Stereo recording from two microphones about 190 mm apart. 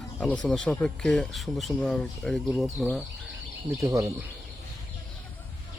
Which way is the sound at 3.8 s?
15° right (ahead or behind).